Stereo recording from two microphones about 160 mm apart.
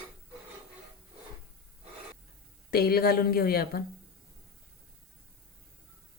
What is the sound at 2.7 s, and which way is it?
A woman's voice, 75° left (ahead or behind).